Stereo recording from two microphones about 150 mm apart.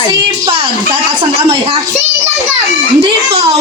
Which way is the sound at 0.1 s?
30° right (ahead or behind).